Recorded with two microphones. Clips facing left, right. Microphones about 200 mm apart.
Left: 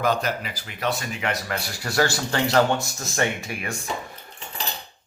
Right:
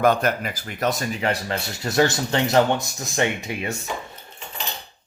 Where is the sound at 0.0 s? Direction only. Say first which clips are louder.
Right 4 dB; 55° right (ahead or behind); by 3.8 s 20° right (ahead or behind).